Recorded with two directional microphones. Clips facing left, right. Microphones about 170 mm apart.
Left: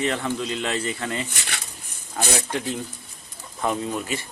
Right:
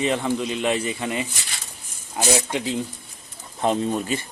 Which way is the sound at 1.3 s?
65° left (ahead or behind).